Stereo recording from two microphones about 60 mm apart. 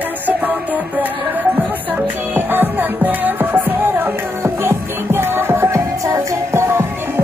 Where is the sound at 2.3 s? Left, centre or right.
Right.